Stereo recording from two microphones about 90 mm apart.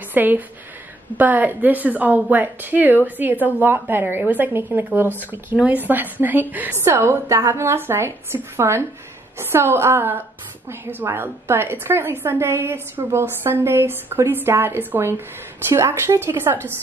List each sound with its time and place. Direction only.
0.1 s a woman's voice: 20° right (ahead or behind)